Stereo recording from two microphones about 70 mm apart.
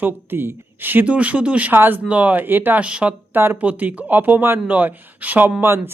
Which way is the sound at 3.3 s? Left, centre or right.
Right.